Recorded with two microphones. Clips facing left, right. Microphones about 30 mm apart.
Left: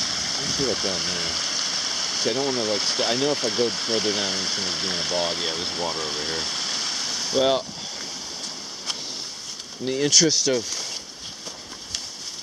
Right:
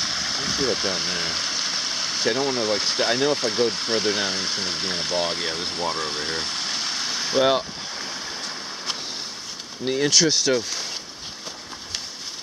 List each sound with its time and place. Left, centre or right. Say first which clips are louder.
0.0 s speech: right 1 dB; centre
9.8 s speech: even; centre